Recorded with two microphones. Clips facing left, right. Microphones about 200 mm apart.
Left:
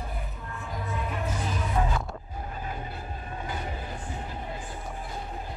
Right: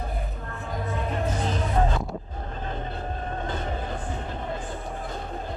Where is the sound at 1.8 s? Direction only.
45° right (ahead or behind).